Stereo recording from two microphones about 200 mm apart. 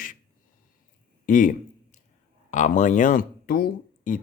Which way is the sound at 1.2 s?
40° left (ahead or behind).